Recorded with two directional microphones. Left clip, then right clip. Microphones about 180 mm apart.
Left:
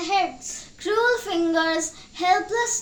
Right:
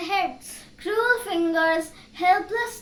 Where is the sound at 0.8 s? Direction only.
10° left (ahead or behind).